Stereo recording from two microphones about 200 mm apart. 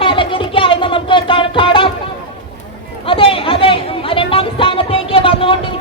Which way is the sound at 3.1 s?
25° left (ahead or behind).